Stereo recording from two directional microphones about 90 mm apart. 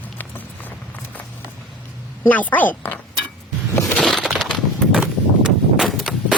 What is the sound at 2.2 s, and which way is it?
Speech, 15° left (ahead or behind).